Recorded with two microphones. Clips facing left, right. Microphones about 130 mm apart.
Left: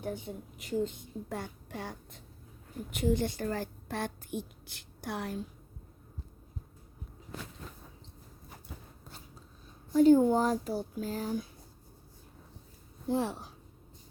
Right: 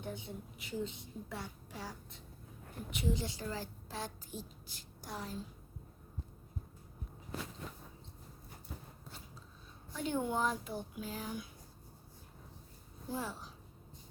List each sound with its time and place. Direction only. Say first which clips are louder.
0.0 s a woman's voice: left 6 dB; 45° left (ahead or behind); by 5.4 s 65° left (ahead or behind)
9.9 s speech: left 14 dB; 40° left (ahead or behind)
13.1 s a woman's voice: left 9 dB; 65° left (ahead or behind)